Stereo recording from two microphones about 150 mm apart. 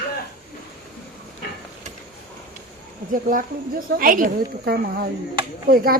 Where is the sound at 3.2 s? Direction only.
65° right (ahead or behind).